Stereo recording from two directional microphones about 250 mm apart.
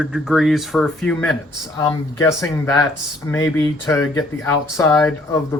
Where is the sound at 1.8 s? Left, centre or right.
Centre.